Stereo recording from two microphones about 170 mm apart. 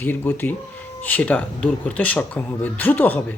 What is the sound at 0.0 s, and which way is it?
Speech, 10° left (ahead or behind).